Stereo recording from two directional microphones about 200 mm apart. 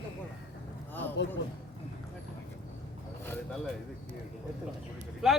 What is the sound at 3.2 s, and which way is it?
Speech, 10° left (ahead or behind).